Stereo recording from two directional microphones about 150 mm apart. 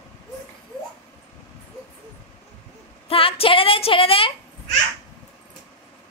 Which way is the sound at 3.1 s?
35° left (ahead or behind).